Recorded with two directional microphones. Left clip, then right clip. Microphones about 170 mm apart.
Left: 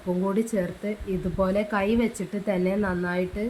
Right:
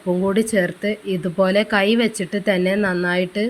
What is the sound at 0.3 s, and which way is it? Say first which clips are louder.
Speech: right 9 dB; 20° right (ahead or behind).